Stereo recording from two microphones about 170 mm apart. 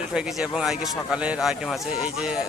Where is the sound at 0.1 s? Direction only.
5° right (ahead or behind).